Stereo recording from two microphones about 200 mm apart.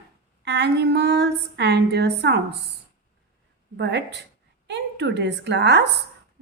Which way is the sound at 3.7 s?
60° right (ahead or behind).